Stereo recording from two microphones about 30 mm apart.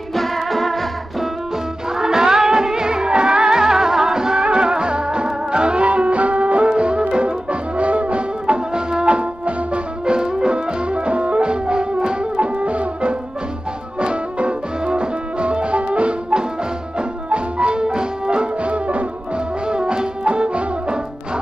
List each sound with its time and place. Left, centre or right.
0.1 s music: centre
2.0 s music: right
6.8 s music: right
8.7 s music: right
13.9 s music: right
19.7 s music: right